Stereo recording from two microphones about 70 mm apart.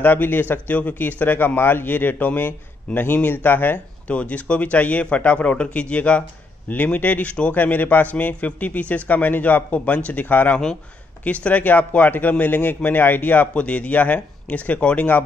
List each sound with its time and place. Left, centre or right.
0.0 s speech: left
4.1 s a man's voice: centre